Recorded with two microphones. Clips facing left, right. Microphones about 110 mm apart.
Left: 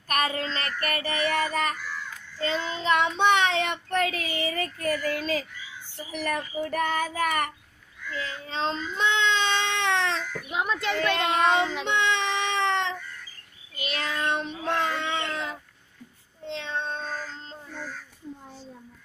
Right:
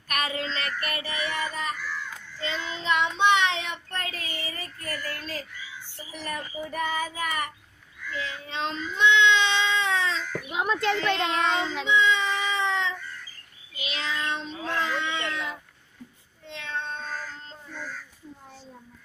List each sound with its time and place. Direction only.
0.1 s child singing: 40° left (ahead or behind); by 1.8 s 55° left (ahead or behind)
2.3 s child singing: 40° left (ahead or behind)
3.6 s child singing: 85° left
6.1 s child singing: 75° left (ahead or behind); by 7.5 s 60° left (ahead or behind)
8.1 s baby cry: 35° left (ahead or behind); by 10.2 s 70° left (ahead or behind)
10.5 s a sound: 5° right (ahead or behind)
11.2 s child singing: 10° left (ahead or behind)
11.8 s baby cry: 65° left (ahead or behind)
13.7 s cat: 50° left (ahead or behind)
16.5 s meow: 30° left (ahead or behind)